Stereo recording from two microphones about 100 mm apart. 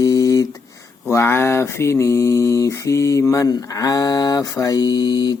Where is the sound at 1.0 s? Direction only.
25° left (ahead or behind).